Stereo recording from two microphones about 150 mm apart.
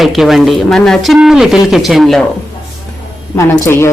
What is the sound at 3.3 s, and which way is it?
Speech, 20° left (ahead or behind).